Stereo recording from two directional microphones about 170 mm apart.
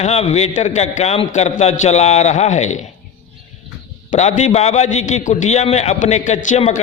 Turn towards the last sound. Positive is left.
turn(degrees=45)  # may be behind; listen again after turning